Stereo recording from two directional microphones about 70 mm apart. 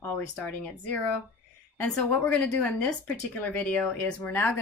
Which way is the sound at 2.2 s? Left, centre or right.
Left.